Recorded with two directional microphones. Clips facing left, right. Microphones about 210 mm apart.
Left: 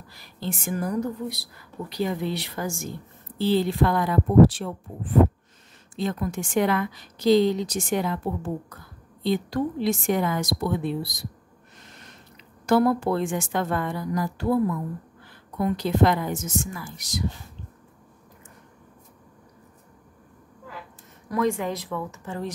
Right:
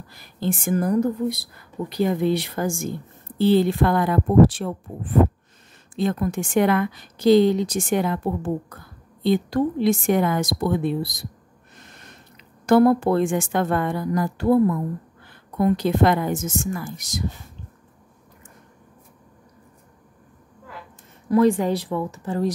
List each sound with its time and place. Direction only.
0.1 s a woman's voice: 50° right (ahead or behind)
5.9 s a woman's voice: 55° right (ahead or behind)
12.6 s a woman's voice: 55° right (ahead or behind)
15.6 s a woman's voice: 55° right (ahead or behind)
21.3 s speech: 30° right (ahead or behind)